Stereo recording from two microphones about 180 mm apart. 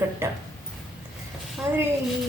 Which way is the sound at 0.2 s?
15° right (ahead or behind).